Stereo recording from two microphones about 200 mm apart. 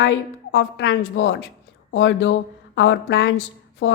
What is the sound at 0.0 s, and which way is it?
A woman's voice, 70° left (ahead or behind).